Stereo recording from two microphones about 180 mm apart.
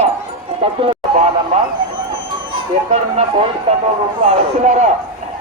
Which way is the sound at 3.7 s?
35° right (ahead or behind).